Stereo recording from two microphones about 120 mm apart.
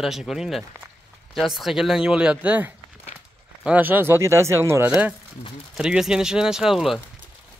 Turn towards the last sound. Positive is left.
turn(degrees=-5)  # may be behind; listen again after turning